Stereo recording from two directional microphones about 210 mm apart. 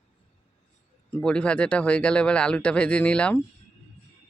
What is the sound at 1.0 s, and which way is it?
Speech, 5° left (ahead or behind).